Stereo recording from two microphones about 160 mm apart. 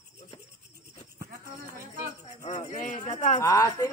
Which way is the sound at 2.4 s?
50° left (ahead or behind).